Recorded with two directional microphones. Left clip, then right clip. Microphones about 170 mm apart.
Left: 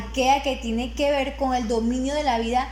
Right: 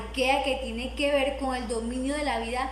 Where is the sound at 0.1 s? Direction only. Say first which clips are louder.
Left 4 dB; 50° left (ahead or behind).